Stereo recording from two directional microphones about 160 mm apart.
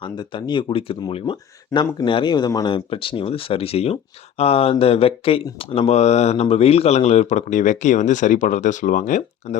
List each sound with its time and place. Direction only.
0.0 s speech: 30° left (ahead or behind); by 9.6 s 50° left (ahead or behind)